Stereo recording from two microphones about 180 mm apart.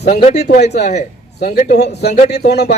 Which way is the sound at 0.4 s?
60° left (ahead or behind).